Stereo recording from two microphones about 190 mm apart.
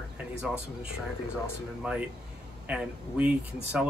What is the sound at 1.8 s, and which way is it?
Speech, 10° right (ahead or behind).